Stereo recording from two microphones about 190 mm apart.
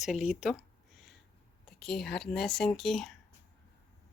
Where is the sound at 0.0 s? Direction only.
Centre (ahead or behind).